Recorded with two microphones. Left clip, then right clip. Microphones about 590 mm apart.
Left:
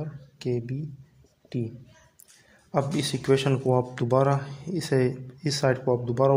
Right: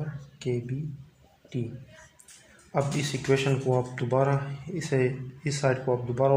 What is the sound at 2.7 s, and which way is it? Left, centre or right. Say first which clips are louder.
Speech: left 2 dB; left.